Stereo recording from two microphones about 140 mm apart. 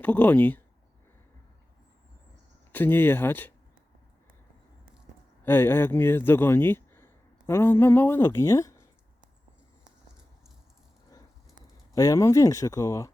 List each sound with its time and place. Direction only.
0.0 s speech: 10° left (ahead or behind)
2.7 s speech: 15° left (ahead or behind)
5.4 s speech: 15° left (ahead or behind)
11.9 s speech: 25° left (ahead or behind)